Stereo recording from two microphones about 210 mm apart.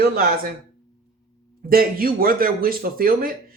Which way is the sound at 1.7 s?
45° right (ahead or behind).